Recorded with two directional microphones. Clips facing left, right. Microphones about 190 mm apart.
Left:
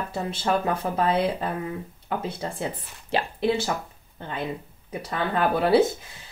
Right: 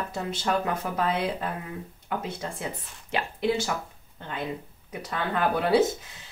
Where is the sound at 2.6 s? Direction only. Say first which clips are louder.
Left 4 dB; 30° left (ahead or behind).